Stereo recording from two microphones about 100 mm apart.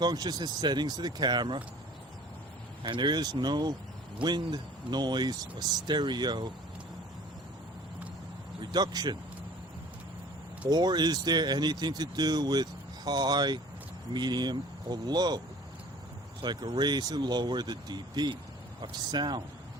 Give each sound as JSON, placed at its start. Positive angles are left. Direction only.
{"t": 0.0, "sound": "speech", "side_deg": -45}
{"t": 2.8, "sound": "speech", "side_deg": -50}
{"t": 8.6, "sound": "speech", "side_deg": -45}
{"t": 10.7, "sound": "speech", "side_deg": -45}
{"t": 16.4, "sound": "speech", "side_deg": -50}